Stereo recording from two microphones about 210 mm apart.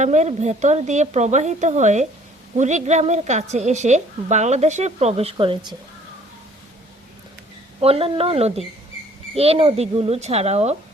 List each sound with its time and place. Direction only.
0.0 s a woman's voice: 35° right (ahead or behind)
7.8 s speech: 30° right (ahead or behind)